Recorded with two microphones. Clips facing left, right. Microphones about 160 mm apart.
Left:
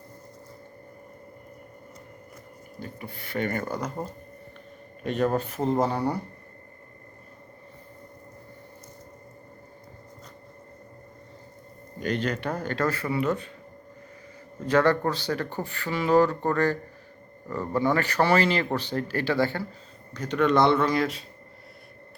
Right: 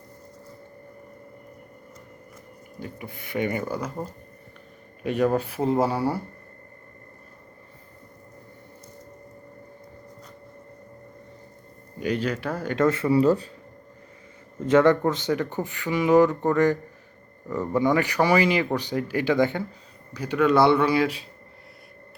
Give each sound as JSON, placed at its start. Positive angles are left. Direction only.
{"t": 2.8, "sound": "speech", "side_deg": -15}
{"t": 5.0, "sound": "speech", "side_deg": -10}
{"t": 11.9, "sound": "speech", "side_deg": -10}
{"t": 12.8, "sound": "speech", "side_deg": -25}
{"t": 14.7, "sound": "speech", "side_deg": -20}
{"t": 17.7, "sound": "speech", "side_deg": -15}